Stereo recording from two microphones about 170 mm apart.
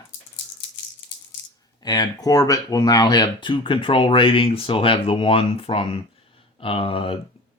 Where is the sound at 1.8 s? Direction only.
25° left (ahead or behind).